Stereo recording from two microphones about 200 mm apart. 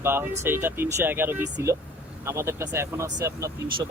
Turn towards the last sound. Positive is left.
turn(degrees=-15)  # may be behind; listen again after turning